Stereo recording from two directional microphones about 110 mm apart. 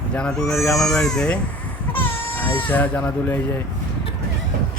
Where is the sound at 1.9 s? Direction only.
15° left (ahead or behind).